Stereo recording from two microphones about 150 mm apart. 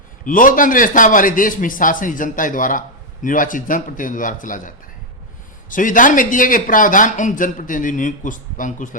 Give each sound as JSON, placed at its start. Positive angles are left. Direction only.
{"t": 0.3, "sound": "a man's voice", "side_deg": 65}